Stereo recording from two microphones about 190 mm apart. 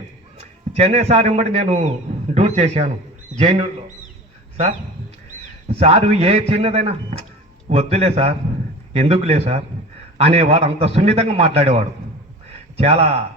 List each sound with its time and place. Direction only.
0.3 s a man's voice: 30° right (ahead or behind)
5.6 s a man's voice: 35° right (ahead or behind)
12.5 s a sound: 35° right (ahead or behind)